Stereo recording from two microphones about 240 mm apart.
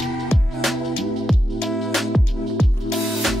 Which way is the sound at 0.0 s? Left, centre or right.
Centre.